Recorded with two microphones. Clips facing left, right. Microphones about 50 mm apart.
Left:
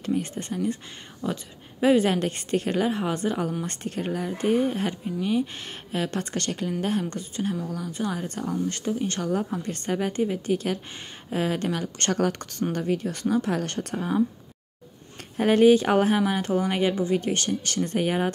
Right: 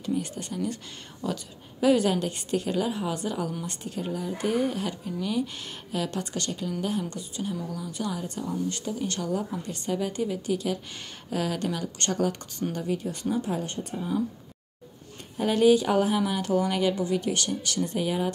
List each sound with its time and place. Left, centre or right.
0.0 s speech: left
7.9 s speech: left
13.6 s speech: left
15.3 s speech: left